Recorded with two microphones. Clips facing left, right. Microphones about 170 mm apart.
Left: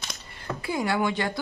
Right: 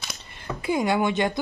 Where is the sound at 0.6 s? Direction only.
20° right (ahead or behind).